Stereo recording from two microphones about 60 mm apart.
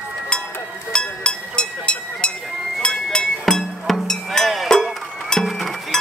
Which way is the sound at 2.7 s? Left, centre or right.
Centre.